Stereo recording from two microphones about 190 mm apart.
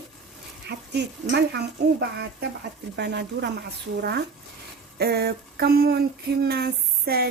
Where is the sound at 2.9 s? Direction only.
60° right (ahead or behind).